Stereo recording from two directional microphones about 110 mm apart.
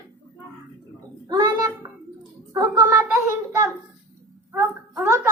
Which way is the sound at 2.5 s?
30° right (ahead or behind).